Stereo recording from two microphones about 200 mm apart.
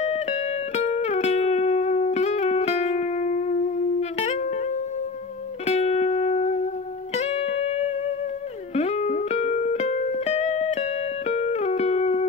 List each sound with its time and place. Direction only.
0.0 s music: 35° left (ahead or behind)
5.7 s music: 35° left (ahead or behind)